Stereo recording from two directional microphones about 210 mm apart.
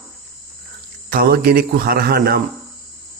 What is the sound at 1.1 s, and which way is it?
A man's voice, 45° right (ahead or behind).